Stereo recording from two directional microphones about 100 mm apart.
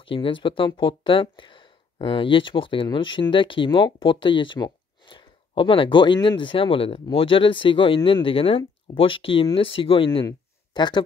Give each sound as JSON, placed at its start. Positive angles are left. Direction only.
{"t": 0.0, "sound": "speech", "side_deg": 60}
{"t": 10.7, "sound": "speech", "side_deg": 45}